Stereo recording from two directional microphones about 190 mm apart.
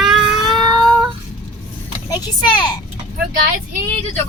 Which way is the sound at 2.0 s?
20° left (ahead or behind).